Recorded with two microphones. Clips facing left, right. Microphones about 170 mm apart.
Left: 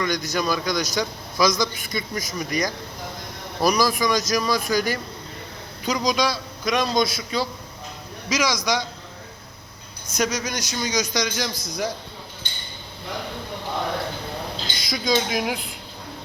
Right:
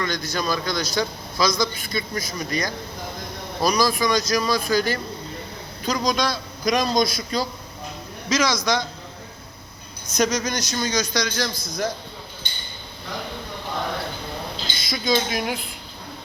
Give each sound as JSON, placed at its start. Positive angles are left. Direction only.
{"t": 0.0, "sound": "a man's voice", "side_deg": 15}
{"t": 10.1, "sound": "a man's voice", "side_deg": 10}
{"t": 11.5, "sound": "a man's voice", "side_deg": 40}
{"t": 14.8, "sound": "a sound", "side_deg": 15}
{"t": 15.1, "sound": "speech", "side_deg": 5}